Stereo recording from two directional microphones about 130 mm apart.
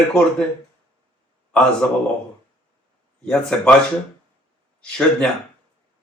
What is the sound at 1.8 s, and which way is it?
Speech, 10° left (ahead or behind).